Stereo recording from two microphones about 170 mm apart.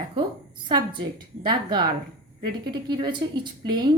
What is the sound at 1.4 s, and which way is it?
Speech, 25° right (ahead or behind).